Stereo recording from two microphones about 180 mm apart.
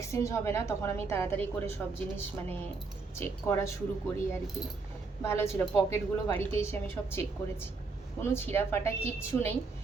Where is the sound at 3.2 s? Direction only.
10° left (ahead or behind).